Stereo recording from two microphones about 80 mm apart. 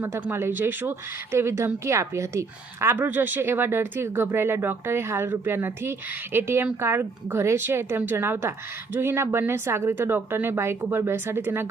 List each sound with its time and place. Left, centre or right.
0.1 s speech: right